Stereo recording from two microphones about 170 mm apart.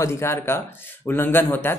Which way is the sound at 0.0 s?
15° left (ahead or behind).